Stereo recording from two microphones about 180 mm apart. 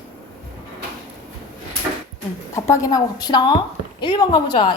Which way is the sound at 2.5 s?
20° left (ahead or behind).